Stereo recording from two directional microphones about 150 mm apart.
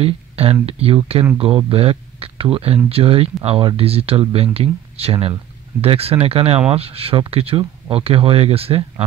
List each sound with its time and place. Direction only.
0.0 s speech: 40° right (ahead or behind)